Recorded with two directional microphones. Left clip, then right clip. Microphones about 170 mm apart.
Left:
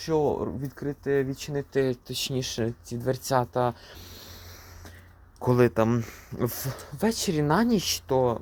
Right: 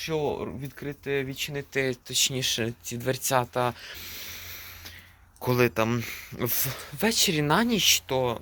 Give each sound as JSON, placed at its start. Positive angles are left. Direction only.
{"t": 0.0, "sound": "speech", "side_deg": 35}
{"t": 0.4, "sound": "speech", "side_deg": 20}
{"t": 1.0, "sound": "speech", "side_deg": 35}
{"t": 2.4, "sound": "speech", "side_deg": 15}
{"t": 5.4, "sound": "speech", "side_deg": 30}
{"t": 7.0, "sound": "speech", "side_deg": 15}
{"t": 7.7, "sound": "speech", "side_deg": 35}